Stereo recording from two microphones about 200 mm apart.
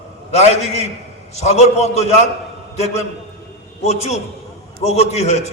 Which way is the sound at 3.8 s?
35° left (ahead or behind).